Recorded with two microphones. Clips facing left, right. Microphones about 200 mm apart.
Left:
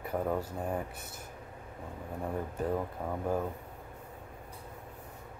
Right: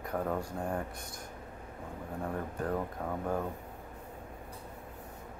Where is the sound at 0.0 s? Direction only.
5° left (ahead or behind).